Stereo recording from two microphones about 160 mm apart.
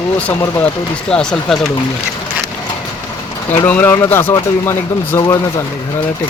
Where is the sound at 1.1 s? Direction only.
5° left (ahead or behind).